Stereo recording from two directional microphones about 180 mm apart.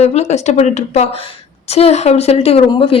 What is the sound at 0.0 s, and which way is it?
A woman's voice, 35° left (ahead or behind).